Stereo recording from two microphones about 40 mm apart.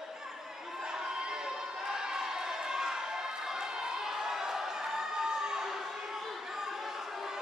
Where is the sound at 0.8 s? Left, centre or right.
Centre.